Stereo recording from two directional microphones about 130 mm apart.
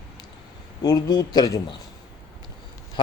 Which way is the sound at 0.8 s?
30° left (ahead or behind).